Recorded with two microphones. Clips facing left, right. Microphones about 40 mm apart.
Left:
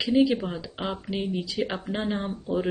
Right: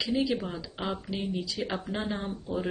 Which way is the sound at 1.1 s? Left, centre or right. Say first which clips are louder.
Left 4 dB; left.